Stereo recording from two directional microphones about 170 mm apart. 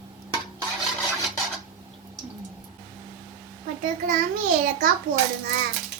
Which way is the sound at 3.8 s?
55° right (ahead or behind).